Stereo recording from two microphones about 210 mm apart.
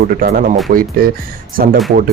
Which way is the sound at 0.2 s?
40° right (ahead or behind).